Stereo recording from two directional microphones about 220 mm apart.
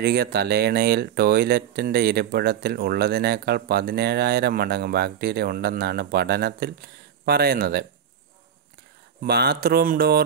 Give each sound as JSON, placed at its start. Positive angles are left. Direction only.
{"t": 0.0, "sound": "speech", "side_deg": -45}
{"t": 9.2, "sound": "speech", "side_deg": -45}